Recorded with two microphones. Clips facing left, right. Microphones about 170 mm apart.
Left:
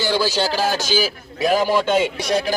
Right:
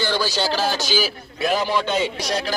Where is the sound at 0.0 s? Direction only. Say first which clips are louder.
Left 3 dB; 10° left (ahead or behind).